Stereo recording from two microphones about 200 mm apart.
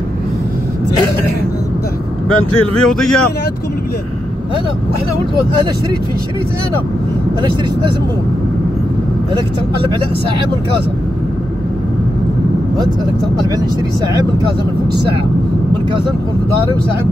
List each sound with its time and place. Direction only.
2.2 s speech: 90° left
2.7 s speech: 5° left (ahead or behind)